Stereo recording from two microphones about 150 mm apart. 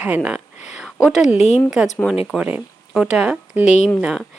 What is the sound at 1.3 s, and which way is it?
Speech, 50° left (ahead or behind).